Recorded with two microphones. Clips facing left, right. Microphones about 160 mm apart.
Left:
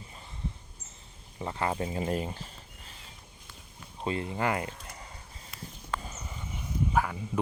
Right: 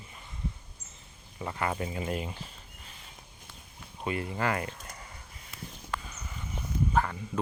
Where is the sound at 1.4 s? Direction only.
25° left (ahead or behind).